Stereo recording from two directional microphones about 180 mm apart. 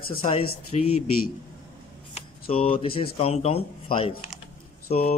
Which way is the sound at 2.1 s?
30° left (ahead or behind).